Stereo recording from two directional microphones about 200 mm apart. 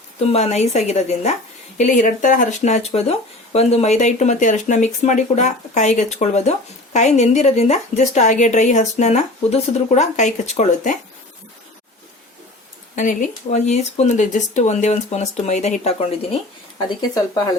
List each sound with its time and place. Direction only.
0.2 s speech: 30° left (ahead or behind)
13.0 s speech: 35° left (ahead or behind)
16.9 s speech: 20° left (ahead or behind)